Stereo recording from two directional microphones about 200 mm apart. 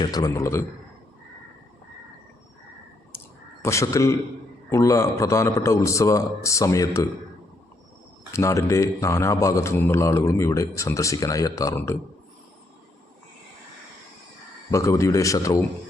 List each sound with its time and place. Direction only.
0.0 s a man's voice: 20° left (ahead or behind)
3.6 s a man's voice: 15° left (ahead or behind)
8.3 s a man's voice: 15° left (ahead or behind)
14.7 s a man's voice: 15° left (ahead or behind)